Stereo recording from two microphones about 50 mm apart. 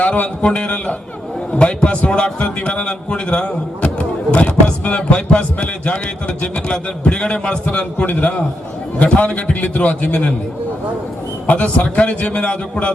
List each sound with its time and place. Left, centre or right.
0.0 s speech: left
11.4 s speech: left